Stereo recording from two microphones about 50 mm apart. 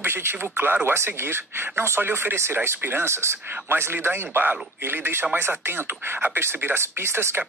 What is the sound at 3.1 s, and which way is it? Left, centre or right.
Speech, right.